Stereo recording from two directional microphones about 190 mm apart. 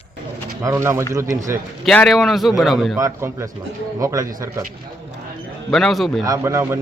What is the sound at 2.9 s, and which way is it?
Speech, 15° right (ahead or behind).